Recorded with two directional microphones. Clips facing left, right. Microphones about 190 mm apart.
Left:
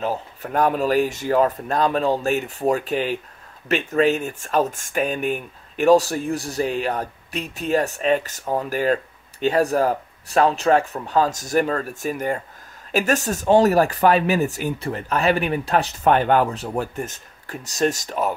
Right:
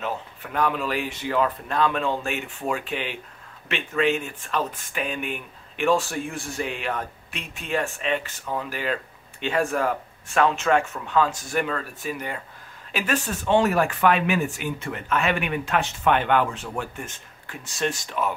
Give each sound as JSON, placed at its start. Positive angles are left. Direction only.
{"t": 0.0, "sound": "speech", "side_deg": 40}